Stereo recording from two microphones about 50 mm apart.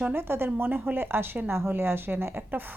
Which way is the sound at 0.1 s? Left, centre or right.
Right.